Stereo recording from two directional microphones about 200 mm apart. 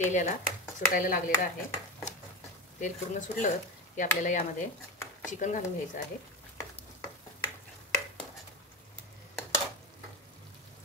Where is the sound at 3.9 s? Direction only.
40° left (ahead or behind).